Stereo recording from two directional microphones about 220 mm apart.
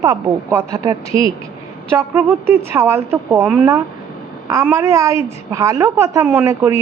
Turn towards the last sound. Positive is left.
turn(degrees=-15)  # may be behind; listen again after turning